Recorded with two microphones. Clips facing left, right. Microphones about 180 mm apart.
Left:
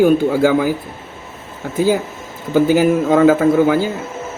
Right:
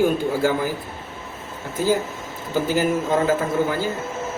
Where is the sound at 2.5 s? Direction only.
65° left (ahead or behind).